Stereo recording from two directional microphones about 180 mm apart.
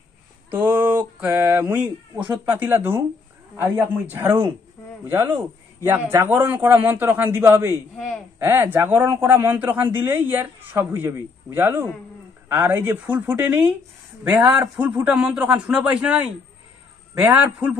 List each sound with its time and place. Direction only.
0.5 s a sound: 10° right (ahead or behind)
2.3 s speech: 10° right (ahead or behind)
14.8 s speech: 10° right (ahead or behind)